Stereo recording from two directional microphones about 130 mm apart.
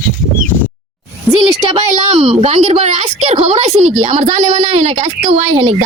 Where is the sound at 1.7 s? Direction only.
45° right (ahead or behind).